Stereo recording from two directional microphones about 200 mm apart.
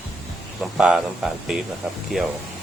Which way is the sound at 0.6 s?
5° right (ahead or behind).